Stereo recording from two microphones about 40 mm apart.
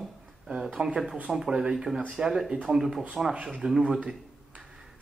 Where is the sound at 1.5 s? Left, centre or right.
Right.